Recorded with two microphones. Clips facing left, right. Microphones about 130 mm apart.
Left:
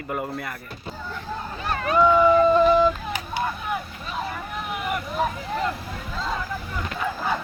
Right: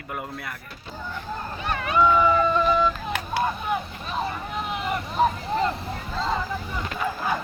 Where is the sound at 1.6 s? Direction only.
35° left (ahead or behind).